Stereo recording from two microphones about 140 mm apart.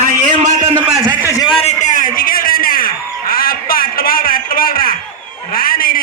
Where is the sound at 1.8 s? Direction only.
70° left (ahead or behind).